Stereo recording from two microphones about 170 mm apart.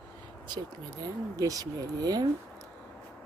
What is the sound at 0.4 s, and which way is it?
Speech, 25° right (ahead or behind).